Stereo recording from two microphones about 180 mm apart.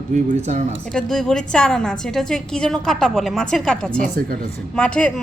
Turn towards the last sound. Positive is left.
turn(degrees=5)  # may be behind; listen again after turning